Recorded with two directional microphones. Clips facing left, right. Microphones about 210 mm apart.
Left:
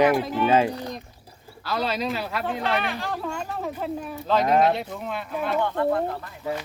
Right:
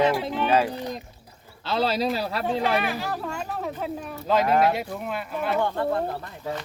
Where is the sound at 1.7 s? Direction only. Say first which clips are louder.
Right 2 dB; 30° right (ahead or behind).